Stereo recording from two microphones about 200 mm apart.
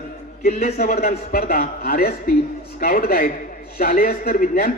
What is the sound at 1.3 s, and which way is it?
A man's voice, 50° left (ahead or behind).